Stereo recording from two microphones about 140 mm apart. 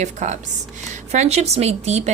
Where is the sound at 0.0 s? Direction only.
60° right (ahead or behind).